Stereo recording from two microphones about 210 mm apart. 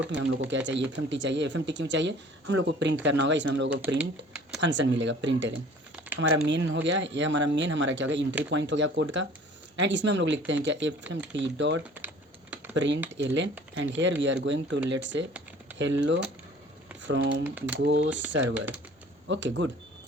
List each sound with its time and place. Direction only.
0.2 s speech: 60° right (ahead or behind)
3.8 s speech: 10° right (ahead or behind)
4.6 s speech: 60° right (ahead or behind)
11.9 s typing: 10° right (ahead or behind)
12.7 s speech: 60° right (ahead or behind)
17.4 s speech: 10° right (ahead or behind)
17.7 s speech: 60° right (ahead or behind)